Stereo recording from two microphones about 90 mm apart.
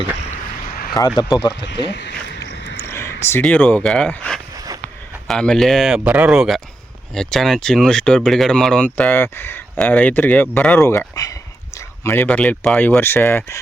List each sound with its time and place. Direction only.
0.9 s speech: 45° left (ahead or behind)
2.8 s a sound: 25° left (ahead or behind)
3.4 s speech: 15° left (ahead or behind)
5.3 s speech: 5° left (ahead or behind)
5.9 s speech: 15° right (ahead or behind)
7.1 s speech: 5° left (ahead or behind)
10.8 s a sound: 30° left (ahead or behind)
12.2 s speech: 15° left (ahead or behind)